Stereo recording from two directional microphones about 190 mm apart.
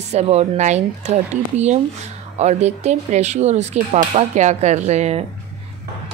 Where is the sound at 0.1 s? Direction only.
35° right (ahead or behind).